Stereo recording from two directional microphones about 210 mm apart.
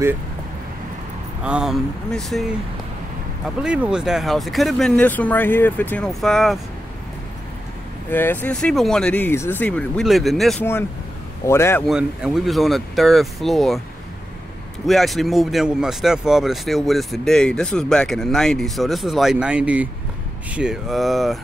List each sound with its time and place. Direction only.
1.4 s speech: 5° right (ahead or behind)
3.6 s speech: 5° right (ahead or behind)
8.1 s a man's voice: 10° left (ahead or behind)
11.9 s speech: 5° right (ahead or behind)
14.9 s speech: centre (ahead or behind)